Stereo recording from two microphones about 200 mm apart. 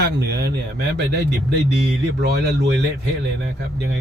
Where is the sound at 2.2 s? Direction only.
55° right (ahead or behind).